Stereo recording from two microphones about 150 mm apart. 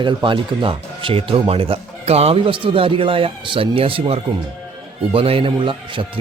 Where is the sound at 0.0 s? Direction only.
30° right (ahead or behind).